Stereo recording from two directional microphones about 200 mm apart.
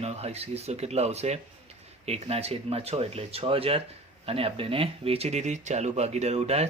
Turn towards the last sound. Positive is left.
turn(degrees=-30)  # may be behind; listen again after turning